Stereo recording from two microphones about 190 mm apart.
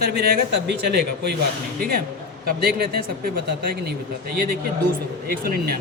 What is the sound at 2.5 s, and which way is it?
Speech, 50° right (ahead or behind).